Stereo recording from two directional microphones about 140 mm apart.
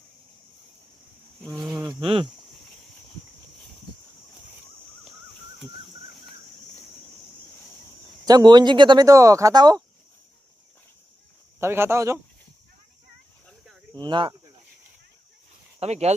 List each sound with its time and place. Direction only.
1.6 s a sound: 10° right (ahead or behind)
2.0 s speech: 40° right (ahead or behind)
8.2 s speech: 30° right (ahead or behind)
11.6 s speech: 15° right (ahead or behind)
13.9 s speech: 30° right (ahead or behind)
15.8 s speech: 50° right (ahead or behind)